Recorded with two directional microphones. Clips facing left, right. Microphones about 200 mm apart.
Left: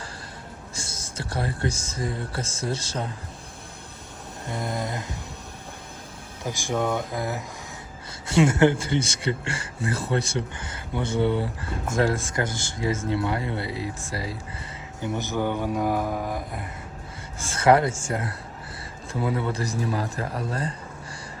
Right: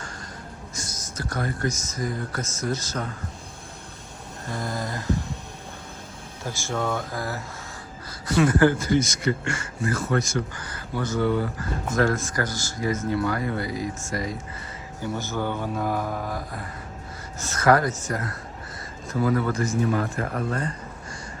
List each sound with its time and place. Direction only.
0.8 s speech: 30° left (ahead or behind)
4.4 s speech: 20° left (ahead or behind)
6.4 s mantra: 15° left (ahead or behind)
8.3 s speech: 25° left (ahead or behind)
15.0 s mantra: 20° left (ahead or behind)
17.4 s speech: 30° left (ahead or behind)